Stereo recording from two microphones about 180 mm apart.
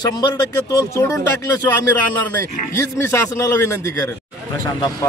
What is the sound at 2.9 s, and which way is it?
Speech, 15° left (ahead or behind).